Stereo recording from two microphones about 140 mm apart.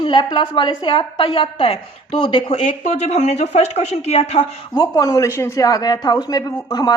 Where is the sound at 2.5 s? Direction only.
50° left (ahead or behind).